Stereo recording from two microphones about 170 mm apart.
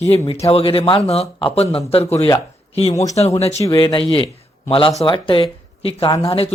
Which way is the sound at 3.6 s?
25° left (ahead or behind).